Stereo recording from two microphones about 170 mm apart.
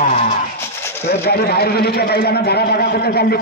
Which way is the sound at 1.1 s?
70° left (ahead or behind).